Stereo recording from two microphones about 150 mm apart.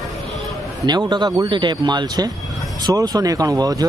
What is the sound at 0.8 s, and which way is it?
Speech, 30° right (ahead or behind).